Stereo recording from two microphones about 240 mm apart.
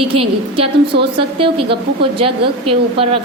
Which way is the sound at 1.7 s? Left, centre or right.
Right.